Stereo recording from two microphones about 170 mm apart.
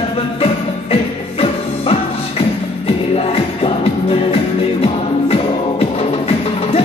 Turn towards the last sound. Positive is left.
turn(degrees=35)  # may be behind; listen again after turning